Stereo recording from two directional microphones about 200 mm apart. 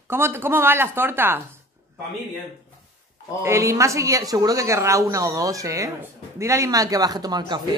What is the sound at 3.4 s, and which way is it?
Speech, 15° right (ahead or behind).